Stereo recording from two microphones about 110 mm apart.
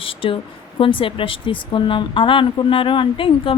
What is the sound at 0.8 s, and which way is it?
Speech, 55° left (ahead or behind).